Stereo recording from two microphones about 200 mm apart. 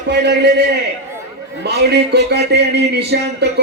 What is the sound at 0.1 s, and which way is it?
Speech, 55° right (ahead or behind).